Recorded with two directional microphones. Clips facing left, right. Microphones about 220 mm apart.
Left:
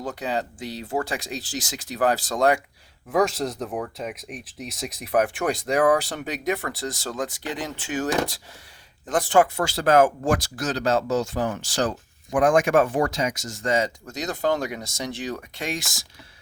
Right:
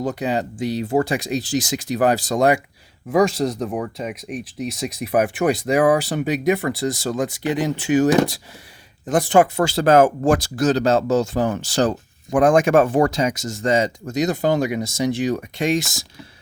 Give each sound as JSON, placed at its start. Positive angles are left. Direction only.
{"t": 0.0, "sound": "speech", "side_deg": -15}
{"t": 3.1, "sound": "speech", "side_deg": 0}